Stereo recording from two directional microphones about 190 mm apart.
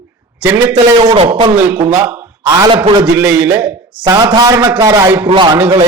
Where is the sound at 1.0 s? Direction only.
30° right (ahead or behind).